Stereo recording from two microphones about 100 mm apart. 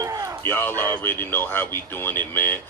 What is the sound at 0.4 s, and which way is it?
Speech, 20° left (ahead or behind).